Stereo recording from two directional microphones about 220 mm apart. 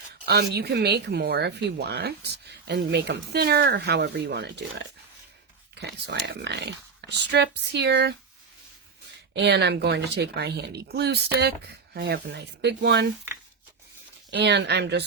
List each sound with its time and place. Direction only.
0.3 s speech: 45° right (ahead or behind)
9.3 s speech: 50° right (ahead or behind)
14.3 s speech: 50° right (ahead or behind)